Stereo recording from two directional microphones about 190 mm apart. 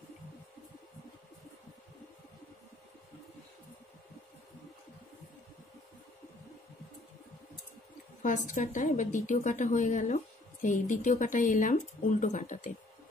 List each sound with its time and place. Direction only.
8.2 s a woman's voice: 40° left (ahead or behind)